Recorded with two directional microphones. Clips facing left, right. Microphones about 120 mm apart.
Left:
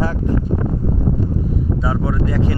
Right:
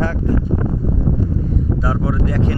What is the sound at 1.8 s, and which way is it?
Speech, centre (ahead or behind).